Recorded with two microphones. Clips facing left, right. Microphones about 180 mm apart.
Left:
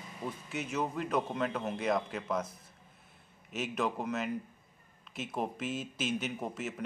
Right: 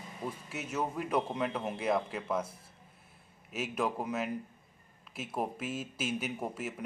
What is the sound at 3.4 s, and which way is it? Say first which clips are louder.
Speech: even; 5° right (ahead or behind).